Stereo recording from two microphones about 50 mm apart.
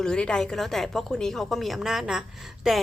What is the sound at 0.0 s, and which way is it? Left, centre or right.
A woman's voice, centre.